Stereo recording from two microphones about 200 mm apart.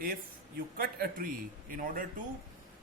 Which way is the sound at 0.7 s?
45° right (ahead or behind).